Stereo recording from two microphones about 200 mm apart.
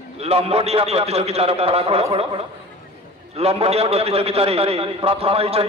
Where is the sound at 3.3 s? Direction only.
30° right (ahead or behind).